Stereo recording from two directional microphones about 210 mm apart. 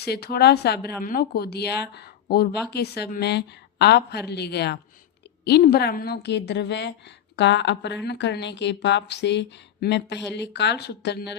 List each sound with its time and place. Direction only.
0.0 s speech: 50° left (ahead or behind)